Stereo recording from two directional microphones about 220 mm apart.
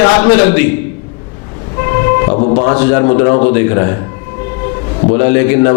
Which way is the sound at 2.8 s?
15° left (ahead or behind).